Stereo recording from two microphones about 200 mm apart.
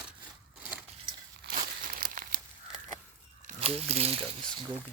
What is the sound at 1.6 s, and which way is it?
Crumpling, 45° right (ahead or behind).